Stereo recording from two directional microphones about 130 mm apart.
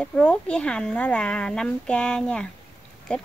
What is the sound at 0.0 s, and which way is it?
A woman's voice, 5° left (ahead or behind).